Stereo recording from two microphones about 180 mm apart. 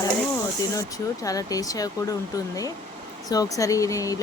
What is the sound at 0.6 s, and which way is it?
Speech, 20° left (ahead or behind).